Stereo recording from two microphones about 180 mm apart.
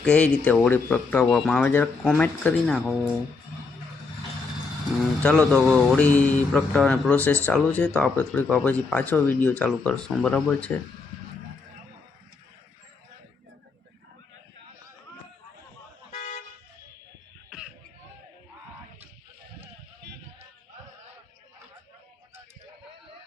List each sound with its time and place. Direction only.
0.0 s speech: 10° left (ahead or behind)
5.2 s speech: 5° left (ahead or behind)
16.1 s toot: 40° left (ahead or behind)